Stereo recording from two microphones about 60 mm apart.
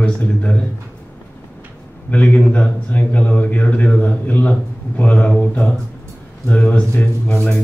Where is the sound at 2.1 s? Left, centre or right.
Left.